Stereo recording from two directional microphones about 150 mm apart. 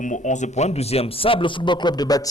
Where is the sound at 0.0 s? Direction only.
55° left (ahead or behind).